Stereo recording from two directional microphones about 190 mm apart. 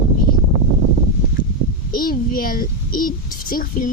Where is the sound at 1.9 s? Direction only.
50° left (ahead or behind).